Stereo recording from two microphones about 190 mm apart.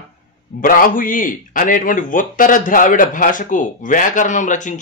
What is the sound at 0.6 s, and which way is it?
A man's voice, 45° left (ahead or behind).